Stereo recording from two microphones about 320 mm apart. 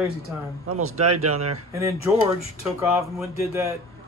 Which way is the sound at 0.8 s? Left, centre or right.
Right.